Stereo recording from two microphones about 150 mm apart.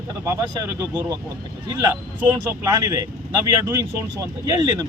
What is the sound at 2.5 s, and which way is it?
Speech, 20° right (ahead or behind).